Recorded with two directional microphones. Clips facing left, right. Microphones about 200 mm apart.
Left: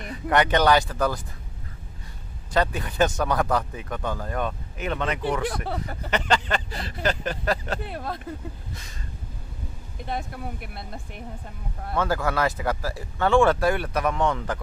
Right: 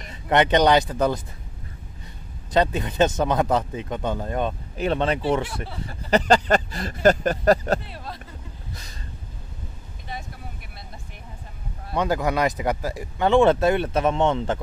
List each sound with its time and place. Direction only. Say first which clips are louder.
0.1 s speech: right 3 dB; 25° right (ahead or behind)
2.5 s speech: right 3 dB; 20° right (ahead or behind); by 7.8 s 40° right (ahead or behind)
7.8 s speech: left 6 dB; 50° left (ahead or behind)
10.0 s speech: left 6 dB; 55° left (ahead or behind)
11.9 s speech: right 2 dB; 20° right (ahead or behind)